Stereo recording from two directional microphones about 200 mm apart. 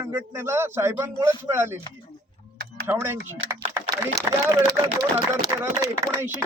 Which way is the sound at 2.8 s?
10° right (ahead or behind).